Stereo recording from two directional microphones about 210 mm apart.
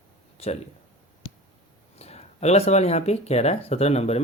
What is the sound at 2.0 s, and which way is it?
Speech, 30° left (ahead or behind).